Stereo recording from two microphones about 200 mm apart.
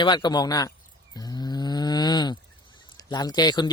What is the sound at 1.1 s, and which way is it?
Livestock, 20° left (ahead or behind).